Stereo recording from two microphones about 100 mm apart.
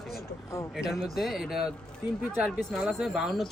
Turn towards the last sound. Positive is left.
turn(degrees=0)  # may be behind; listen again after turning